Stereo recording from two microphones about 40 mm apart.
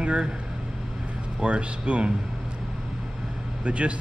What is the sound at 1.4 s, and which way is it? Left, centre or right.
Speech, right.